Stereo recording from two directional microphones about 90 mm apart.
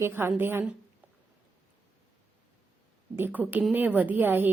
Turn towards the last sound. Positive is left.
turn(degrees=-25)  # may be behind; listen again after turning